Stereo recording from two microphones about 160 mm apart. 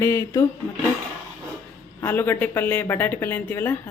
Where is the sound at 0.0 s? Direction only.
20° left (ahead or behind).